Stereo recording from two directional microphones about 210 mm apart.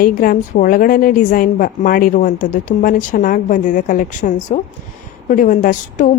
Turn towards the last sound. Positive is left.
turn(degrees=40)  # may be behind; listen again after turning